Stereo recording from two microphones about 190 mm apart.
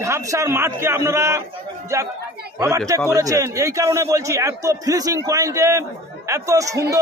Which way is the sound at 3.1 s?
20° right (ahead or behind).